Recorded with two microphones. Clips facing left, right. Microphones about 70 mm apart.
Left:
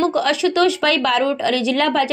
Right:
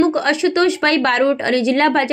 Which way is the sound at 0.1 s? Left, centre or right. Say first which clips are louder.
Right 1 dB; right.